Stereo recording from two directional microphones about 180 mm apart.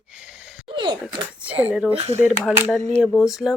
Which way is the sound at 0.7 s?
25° right (ahead or behind).